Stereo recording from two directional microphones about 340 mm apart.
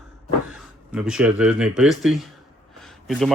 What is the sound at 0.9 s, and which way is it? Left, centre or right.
Speech, centre.